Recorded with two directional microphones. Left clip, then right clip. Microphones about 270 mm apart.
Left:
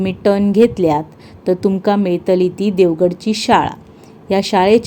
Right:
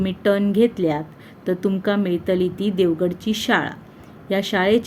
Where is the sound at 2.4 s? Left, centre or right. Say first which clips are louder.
Left 6 dB; left.